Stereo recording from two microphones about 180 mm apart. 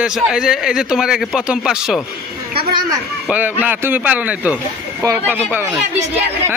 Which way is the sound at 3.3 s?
10° right (ahead or behind).